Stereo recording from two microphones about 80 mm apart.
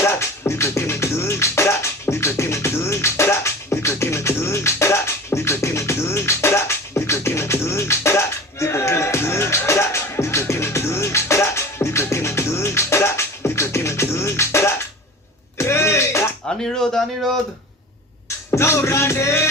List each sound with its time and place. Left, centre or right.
0.0 s music: left
16.6 s a sound: centre
18.5 s music: left